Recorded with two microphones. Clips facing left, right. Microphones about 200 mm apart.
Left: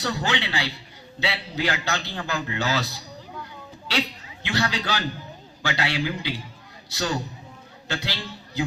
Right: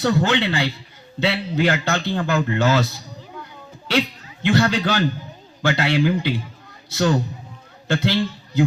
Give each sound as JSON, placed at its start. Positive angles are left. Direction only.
{"t": 0.0, "sound": "a man's voice", "side_deg": -55}
{"t": 4.4, "sound": "a man's voice", "side_deg": -55}